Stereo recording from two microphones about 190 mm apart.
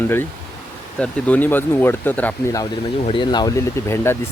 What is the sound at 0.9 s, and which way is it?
Speech, 5° left (ahead or behind).